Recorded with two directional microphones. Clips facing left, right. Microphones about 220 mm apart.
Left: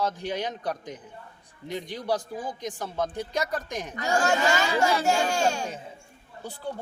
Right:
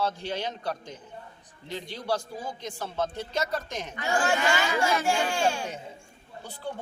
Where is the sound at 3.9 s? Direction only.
40° left (ahead or behind).